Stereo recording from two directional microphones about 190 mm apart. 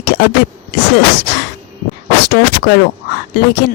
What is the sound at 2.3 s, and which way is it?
Speech, 55° left (ahead or behind).